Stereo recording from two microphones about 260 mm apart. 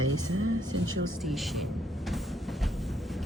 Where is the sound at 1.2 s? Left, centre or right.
Centre.